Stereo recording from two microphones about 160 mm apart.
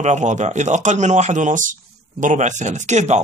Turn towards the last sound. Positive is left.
turn(degrees=-45)  # may be behind; listen again after turning